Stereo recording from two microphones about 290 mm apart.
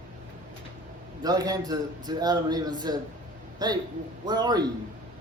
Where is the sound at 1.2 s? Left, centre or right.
Centre.